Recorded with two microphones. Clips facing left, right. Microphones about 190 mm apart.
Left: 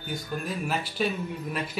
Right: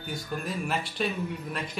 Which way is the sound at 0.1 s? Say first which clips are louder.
Left 1 dB; centre (ahead or behind).